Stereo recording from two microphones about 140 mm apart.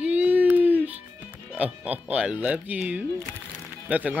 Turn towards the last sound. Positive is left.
turn(degrees=-10)  # may be behind; listen again after turning